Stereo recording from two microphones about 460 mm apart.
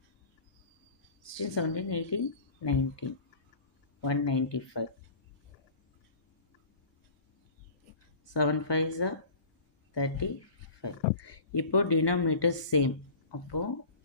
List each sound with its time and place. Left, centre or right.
1.2 s a woman's voice: left
8.3 s speech: left